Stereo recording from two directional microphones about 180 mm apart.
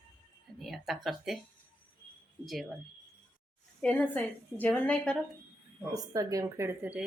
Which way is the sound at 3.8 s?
5° left (ahead or behind).